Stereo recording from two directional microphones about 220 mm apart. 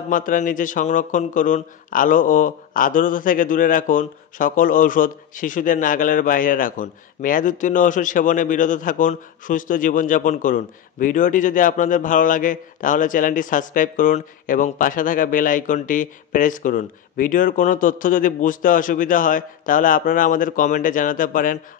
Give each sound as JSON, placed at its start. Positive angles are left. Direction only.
{"t": 0.1, "sound": "a man's voice", "side_deg": 35}